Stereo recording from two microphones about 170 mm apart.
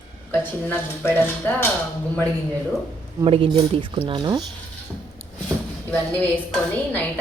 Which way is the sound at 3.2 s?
30° right (ahead or behind).